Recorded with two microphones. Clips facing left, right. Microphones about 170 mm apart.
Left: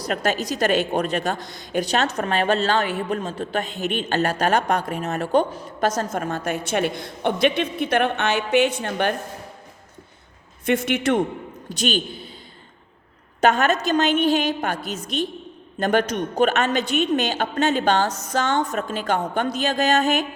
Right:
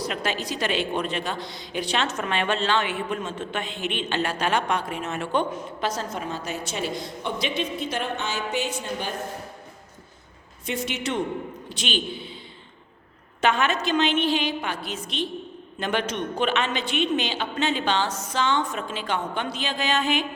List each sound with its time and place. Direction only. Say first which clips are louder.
0.0 s a woman's voice: left 4 dB; 45° left (ahead or behind); by 9.1 s 65° left (ahead or behind)
10.7 s a woman's voice: left 8 dB; 55° left (ahead or behind)
11.8 s a man's voice: left 5 dB; 40° left (ahead or behind)
13.4 s a woman's voice: left 4 dB; 45° left (ahead or behind)